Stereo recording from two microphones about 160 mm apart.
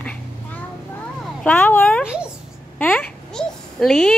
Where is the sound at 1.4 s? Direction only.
10° left (ahead or behind).